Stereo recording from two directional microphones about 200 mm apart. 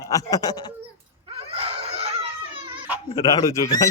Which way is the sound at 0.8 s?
30° right (ahead or behind).